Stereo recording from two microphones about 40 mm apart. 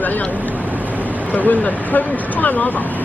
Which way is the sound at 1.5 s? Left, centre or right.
Left.